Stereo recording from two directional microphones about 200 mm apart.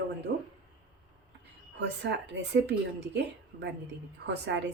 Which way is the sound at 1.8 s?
60° right (ahead or behind).